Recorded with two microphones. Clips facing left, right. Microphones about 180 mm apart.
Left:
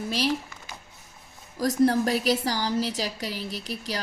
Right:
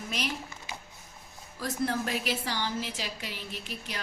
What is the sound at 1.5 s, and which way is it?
A woman's voice, 40° left (ahead or behind).